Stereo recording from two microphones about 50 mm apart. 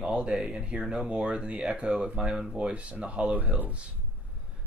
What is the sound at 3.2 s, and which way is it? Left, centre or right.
Speech, right.